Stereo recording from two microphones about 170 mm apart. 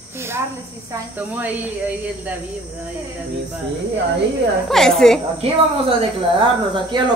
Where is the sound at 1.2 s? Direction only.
10° right (ahead or behind).